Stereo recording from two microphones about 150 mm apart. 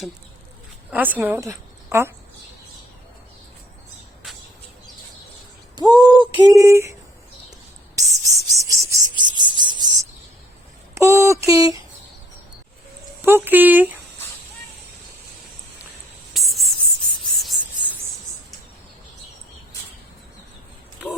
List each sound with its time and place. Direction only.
0.9 s speech: 10° right (ahead or behind)
5.7 s a sound: 25° right (ahead or behind)
6.6 s speech: 20° right (ahead or behind)
7.9 s music: 20° right (ahead or behind)
10.9 s speech: 20° right (ahead or behind)
13.2 s speech: 15° right (ahead or behind)
16.3 s writing: centre (ahead or behind)
17.3 s a sound: centre (ahead or behind)